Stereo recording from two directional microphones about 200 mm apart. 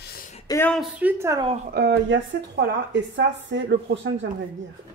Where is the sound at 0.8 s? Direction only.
10° right (ahead or behind).